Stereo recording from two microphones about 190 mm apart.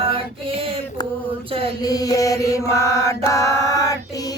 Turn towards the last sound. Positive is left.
turn(degrees=15)  # may be behind; listen again after turning